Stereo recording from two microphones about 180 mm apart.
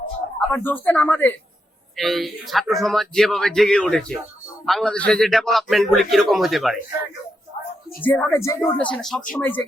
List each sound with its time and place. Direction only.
0.5 s a man's voice: 10° left (ahead or behind)
8.0 s a man's voice: 10° left (ahead or behind)
8.6 s a man's voice: 5° left (ahead or behind)